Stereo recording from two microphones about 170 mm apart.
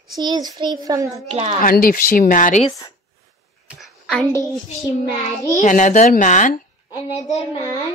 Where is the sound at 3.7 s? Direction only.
Centre (ahead or behind).